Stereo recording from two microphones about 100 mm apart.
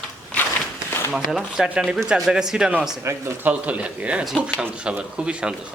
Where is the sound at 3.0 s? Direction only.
25° right (ahead or behind).